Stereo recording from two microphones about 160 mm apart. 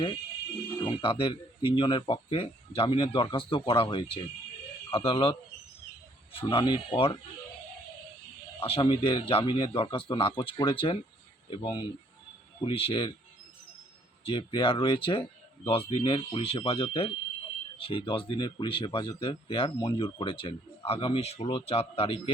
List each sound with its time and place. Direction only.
0.9 s speech: 30° left (ahead or behind)
8.6 s speech: 35° left (ahead or behind)
14.3 s speech: 30° left (ahead or behind)